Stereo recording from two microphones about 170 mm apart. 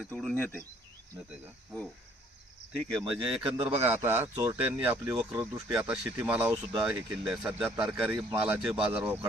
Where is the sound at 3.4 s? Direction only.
30° right (ahead or behind).